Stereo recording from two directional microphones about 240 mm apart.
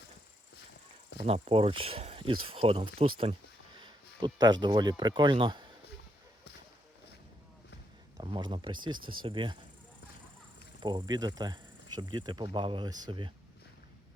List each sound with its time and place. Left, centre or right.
1.2 s speech: right
3.8 s a sound: centre
4.6 s speech: centre
8.2 s speech: centre
10.8 s speech: centre